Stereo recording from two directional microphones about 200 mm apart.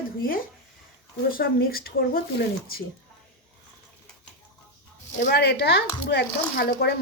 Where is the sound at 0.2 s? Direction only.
45° left (ahead or behind).